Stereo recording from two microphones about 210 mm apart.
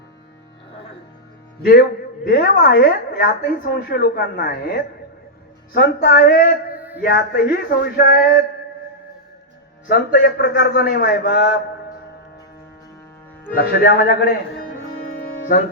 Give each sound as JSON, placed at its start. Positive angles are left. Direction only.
{"t": 2.2, "sound": "a woman's voice", "side_deg": 50}
{"t": 6.7, "sound": "a sound", "side_deg": -10}
{"t": 7.0, "sound": "a woman's voice", "side_deg": 50}
{"t": 9.9, "sound": "a woman's voice", "side_deg": 50}
{"t": 13.6, "sound": "a woman's voice", "side_deg": 45}